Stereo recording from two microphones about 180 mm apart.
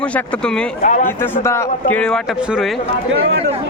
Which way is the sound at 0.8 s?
45° left (ahead or behind).